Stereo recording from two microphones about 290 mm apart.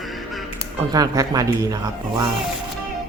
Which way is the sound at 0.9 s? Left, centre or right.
Centre.